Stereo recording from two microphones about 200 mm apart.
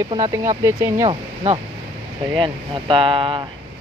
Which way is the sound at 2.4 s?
25° right (ahead or behind).